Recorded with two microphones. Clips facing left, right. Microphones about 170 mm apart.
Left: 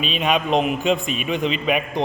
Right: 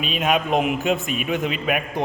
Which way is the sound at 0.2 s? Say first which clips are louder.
Even; 5° right (ahead or behind).